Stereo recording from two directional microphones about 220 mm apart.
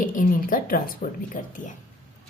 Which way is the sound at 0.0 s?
35° left (ahead or behind).